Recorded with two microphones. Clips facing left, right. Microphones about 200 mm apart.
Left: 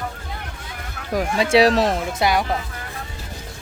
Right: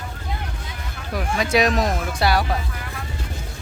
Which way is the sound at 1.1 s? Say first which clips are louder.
Left 4 dB; 30° left (ahead or behind).